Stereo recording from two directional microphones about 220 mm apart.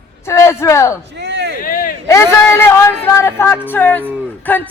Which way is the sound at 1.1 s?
50° right (ahead or behind).